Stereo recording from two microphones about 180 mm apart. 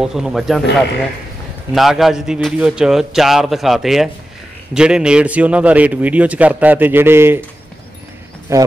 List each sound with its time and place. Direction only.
0.0 s a man's voice: centre (ahead or behind)
1.7 s a man's voice: centre (ahead or behind)
8.5 s a man's voice: 15° right (ahead or behind)